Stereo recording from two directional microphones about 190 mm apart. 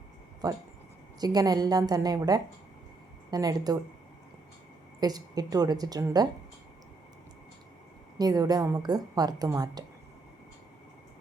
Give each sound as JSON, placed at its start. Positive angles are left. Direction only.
{"t": 0.4, "sound": "a woman's voice", "side_deg": -20}
{"t": 4.9, "sound": "a woman's voice", "side_deg": -20}
{"t": 8.2, "sound": "a woman's voice", "side_deg": -20}